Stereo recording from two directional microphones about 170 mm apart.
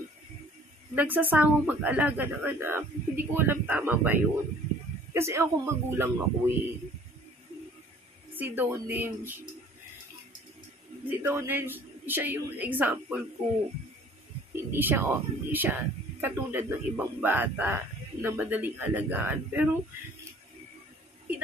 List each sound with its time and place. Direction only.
0.9 s speech: 10° right (ahead or behind)
8.4 s speech: 10° right (ahead or behind)
11.1 s speech: 10° right (ahead or behind)
14.5 s speech: 10° right (ahead or behind)